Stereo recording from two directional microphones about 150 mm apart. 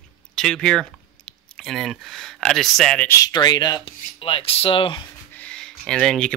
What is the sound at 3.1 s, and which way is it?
Rub, 25° left (ahead or behind).